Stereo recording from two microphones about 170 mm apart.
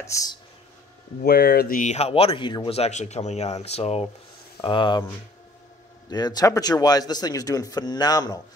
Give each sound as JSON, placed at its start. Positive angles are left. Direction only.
{"t": 0.0, "sound": "a man's voice", "side_deg": 20}
{"t": 1.2, "sound": "speech", "side_deg": 65}
{"t": 4.6, "sound": "a man's voice", "side_deg": 25}
{"t": 6.0, "sound": "a man's voice", "side_deg": 25}